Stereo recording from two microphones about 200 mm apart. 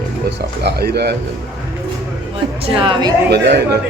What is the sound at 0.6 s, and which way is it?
Speech, 55° right (ahead or behind).